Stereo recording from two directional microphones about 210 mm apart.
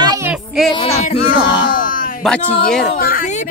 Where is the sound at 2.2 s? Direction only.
5° left (ahead or behind).